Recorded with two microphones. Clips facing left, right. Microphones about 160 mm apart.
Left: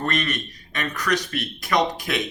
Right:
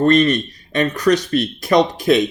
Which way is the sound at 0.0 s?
30° right (ahead or behind).